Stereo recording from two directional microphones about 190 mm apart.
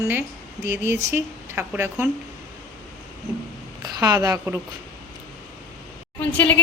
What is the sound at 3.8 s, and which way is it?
Speech, 20° right (ahead or behind).